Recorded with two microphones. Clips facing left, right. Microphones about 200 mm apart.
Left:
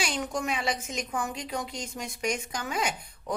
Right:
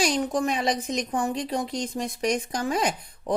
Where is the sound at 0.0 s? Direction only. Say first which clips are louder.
Right 7 dB; 35° right (ahead or behind).